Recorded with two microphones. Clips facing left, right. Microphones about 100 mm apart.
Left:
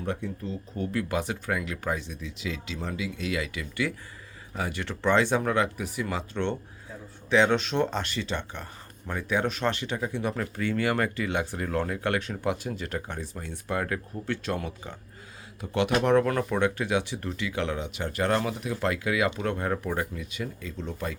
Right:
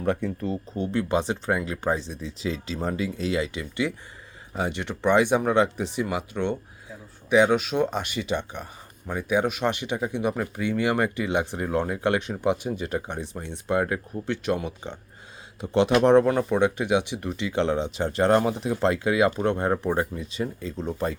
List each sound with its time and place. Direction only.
0.0 s speech: 55° right (ahead or behind)
0.8 s speech: 25° right (ahead or behind)